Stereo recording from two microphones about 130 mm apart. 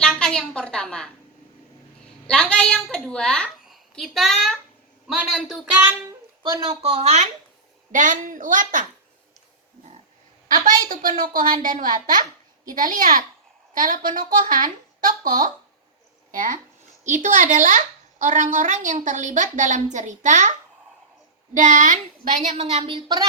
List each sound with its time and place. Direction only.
0.0 s a sound: 5° left (ahead or behind)
2.2 s a woman's voice: 10° left (ahead or behind)
6.7 s speech: 50° right (ahead or behind)
7.9 s a woman's voice: 80° right
10.5 s a woman's voice: 90° right
17.2 s a woman's voice: 70° right (ahead or behind)
21.5 s a woman's voice: 70° right (ahead or behind); by 23.2 s 40° right (ahead or behind)